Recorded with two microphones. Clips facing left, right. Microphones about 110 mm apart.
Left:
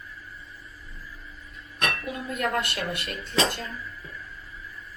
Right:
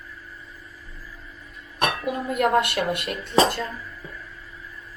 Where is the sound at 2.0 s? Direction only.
45° right (ahead or behind).